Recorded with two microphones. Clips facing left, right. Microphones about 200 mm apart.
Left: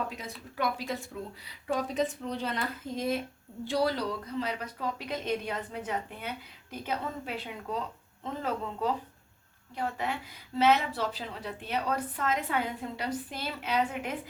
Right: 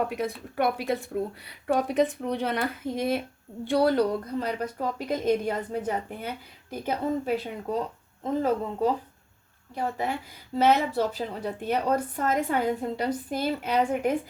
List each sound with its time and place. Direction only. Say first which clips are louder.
0.1 s a woman's voice: right 11 dB; 60° right (ahead or behind); by 8.9 s 40° right (ahead or behind)
10.6 s speech: right 3 dB; 45° right (ahead or behind)